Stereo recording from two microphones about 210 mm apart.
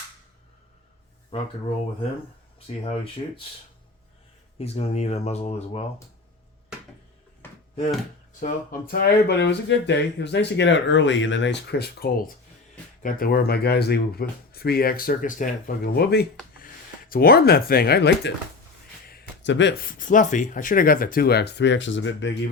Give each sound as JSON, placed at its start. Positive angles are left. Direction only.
{"t": 1.3, "sound": "speech", "side_deg": 30}
{"t": 2.6, "sound": "speech", "side_deg": 25}
{"t": 4.5, "sound": "speech", "side_deg": 30}
{"t": 7.4, "sound": "a sound", "side_deg": 10}
{"t": 8.4, "sound": "speech", "side_deg": 40}